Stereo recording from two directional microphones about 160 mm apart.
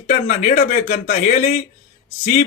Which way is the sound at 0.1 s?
55° left (ahead or behind).